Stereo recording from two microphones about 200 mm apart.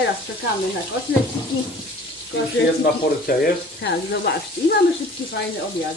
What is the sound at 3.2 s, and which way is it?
Speech, 50° left (ahead or behind).